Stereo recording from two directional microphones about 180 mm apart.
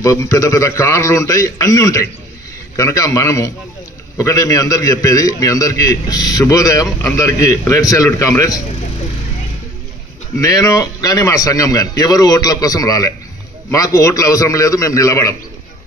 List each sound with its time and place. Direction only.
0.0 s a man's voice: 15° left (ahead or behind)
10.4 s a man's voice: 20° left (ahead or behind)